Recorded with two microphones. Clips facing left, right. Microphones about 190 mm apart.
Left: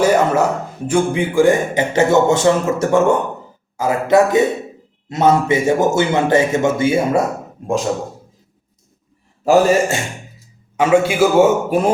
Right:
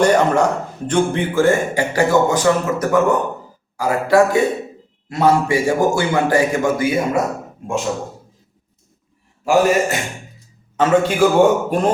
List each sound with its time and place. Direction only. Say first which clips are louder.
0.0 s speech: even; 5° left (ahead or behind); by 7.0 s 25° left (ahead or behind)
9.4 s a man's voice: left 2 dB; 35° left (ahead or behind)
10.8 s a man's voice: left 1 dB; 10° left (ahead or behind)